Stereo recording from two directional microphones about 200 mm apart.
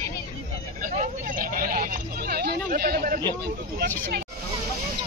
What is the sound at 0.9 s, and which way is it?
Hubbub, 45° right (ahead or behind).